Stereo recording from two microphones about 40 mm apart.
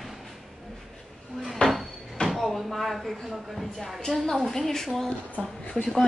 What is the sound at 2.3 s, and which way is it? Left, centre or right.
Speech, centre.